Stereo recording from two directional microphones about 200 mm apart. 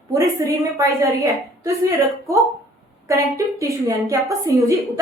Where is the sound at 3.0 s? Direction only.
15° right (ahead or behind).